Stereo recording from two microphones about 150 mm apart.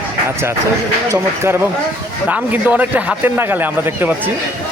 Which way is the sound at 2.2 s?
10° right (ahead or behind).